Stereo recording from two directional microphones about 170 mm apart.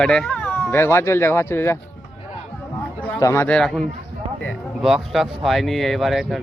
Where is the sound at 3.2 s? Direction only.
15° left (ahead or behind).